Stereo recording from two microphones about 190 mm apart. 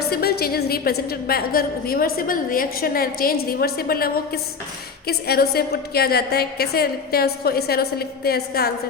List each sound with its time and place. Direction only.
0.1 s a woman's voice: 55° left (ahead or behind)